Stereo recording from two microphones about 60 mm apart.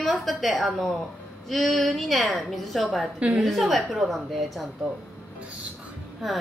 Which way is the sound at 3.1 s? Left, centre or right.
Centre.